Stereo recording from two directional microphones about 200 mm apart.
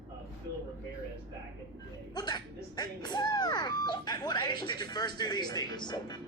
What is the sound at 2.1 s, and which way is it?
Speech, 20° left (ahead or behind).